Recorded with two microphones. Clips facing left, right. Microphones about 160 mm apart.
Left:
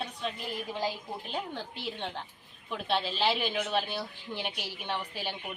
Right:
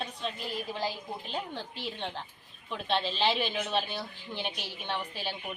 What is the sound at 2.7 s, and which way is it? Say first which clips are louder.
A woman's voice: even; 10° left (ahead or behind).